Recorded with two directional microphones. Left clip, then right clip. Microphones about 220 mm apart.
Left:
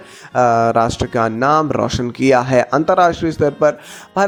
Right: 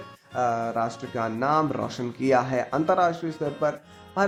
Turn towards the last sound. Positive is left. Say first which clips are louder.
# left 8 dB
turn(degrees=35)  # may be behind; listen again after turning